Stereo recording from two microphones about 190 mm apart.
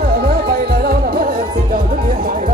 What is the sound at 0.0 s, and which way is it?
Music, 55° right (ahead or behind).